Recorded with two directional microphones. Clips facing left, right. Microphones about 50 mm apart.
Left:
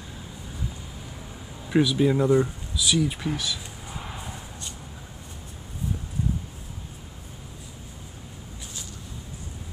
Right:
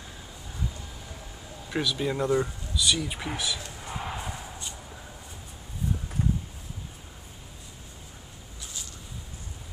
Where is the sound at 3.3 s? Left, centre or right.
Centre.